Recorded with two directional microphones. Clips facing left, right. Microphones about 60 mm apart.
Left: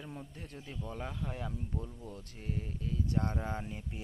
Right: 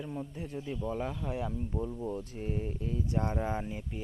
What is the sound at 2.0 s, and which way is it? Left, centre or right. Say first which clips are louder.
Speech: right 9 dB; right.